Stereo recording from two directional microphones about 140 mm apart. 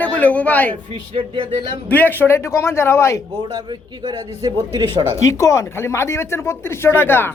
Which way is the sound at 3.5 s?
35° right (ahead or behind).